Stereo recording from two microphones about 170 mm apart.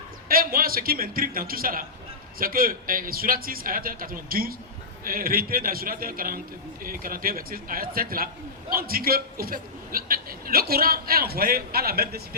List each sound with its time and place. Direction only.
0.3 s a man's voice: 60° right (ahead or behind)